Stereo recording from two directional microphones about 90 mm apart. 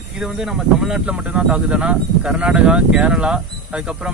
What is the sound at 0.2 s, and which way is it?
Speech, 5° right (ahead or behind).